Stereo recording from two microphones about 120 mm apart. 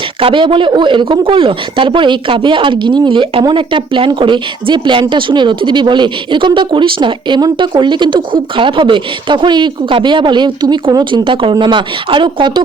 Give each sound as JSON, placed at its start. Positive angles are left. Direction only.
{"t": 0.2, "sound": "speech", "side_deg": -45}